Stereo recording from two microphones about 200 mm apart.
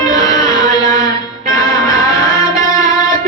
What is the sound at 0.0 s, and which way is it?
Music, 20° left (ahead or behind).